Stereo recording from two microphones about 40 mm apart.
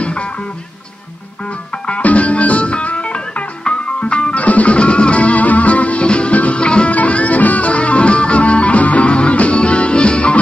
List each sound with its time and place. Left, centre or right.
0.0 s music: left
1.9 s music: left